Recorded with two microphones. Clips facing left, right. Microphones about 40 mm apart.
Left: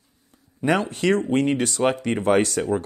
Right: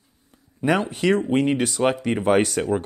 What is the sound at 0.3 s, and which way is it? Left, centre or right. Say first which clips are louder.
Speech: even; centre.